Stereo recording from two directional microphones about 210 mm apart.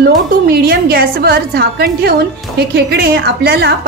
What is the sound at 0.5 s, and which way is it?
A woman's voice, 45° right (ahead or behind).